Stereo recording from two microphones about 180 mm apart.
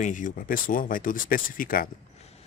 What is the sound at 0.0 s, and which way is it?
Speech, 45° left (ahead or behind).